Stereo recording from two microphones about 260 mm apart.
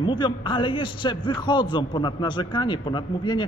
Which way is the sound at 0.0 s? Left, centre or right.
Centre.